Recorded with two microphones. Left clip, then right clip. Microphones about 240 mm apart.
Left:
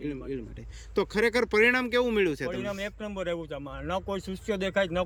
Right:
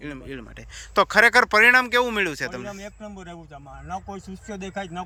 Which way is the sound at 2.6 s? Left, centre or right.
Left.